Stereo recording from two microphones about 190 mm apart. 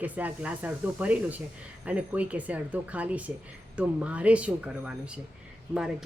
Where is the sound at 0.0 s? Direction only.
10° right (ahead or behind).